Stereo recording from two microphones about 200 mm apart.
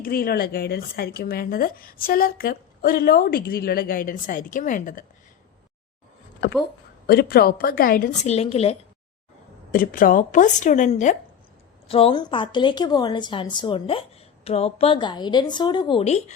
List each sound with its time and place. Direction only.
0.0 s speech: 45° left (ahead or behind)
6.4 s speech: 45° left (ahead or behind); by 8.8 s 30° left (ahead or behind)
9.7 s a woman's voice: 45° left (ahead or behind)